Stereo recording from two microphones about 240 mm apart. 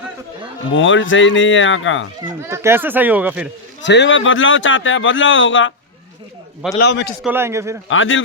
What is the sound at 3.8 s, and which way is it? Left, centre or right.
Speech, left.